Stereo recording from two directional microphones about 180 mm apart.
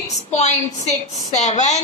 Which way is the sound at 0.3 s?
40° left (ahead or behind).